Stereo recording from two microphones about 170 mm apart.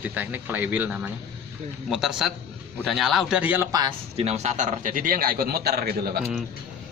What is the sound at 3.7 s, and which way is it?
Speech, 25° right (ahead or behind).